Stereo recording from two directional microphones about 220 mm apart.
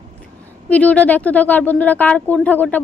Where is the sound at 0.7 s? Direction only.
5° left (ahead or behind).